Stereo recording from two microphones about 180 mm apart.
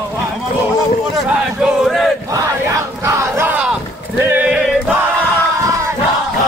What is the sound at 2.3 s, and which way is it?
Battle cry, 15° right (ahead or behind).